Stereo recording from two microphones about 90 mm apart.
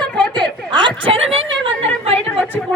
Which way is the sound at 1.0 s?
90° right.